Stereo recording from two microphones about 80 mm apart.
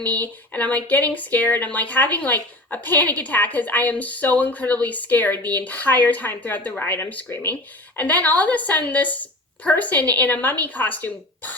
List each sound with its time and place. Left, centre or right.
0.0 s speech: centre